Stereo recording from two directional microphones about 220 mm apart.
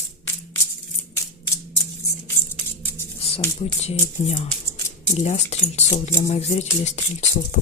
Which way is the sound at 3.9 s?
30° left (ahead or behind).